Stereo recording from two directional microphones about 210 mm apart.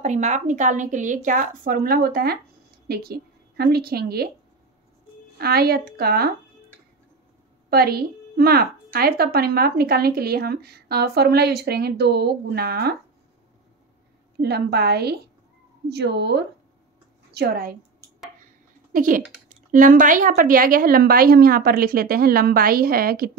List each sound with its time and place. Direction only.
0.0 s a woman's voice: 35° right (ahead or behind)
5.4 s a woman's voice: 45° right (ahead or behind)
7.7 s a woman's voice: 45° right (ahead or behind)
14.4 s a woman's voice: 50° right (ahead or behind)
18.9 s a woman's voice: 40° right (ahead or behind)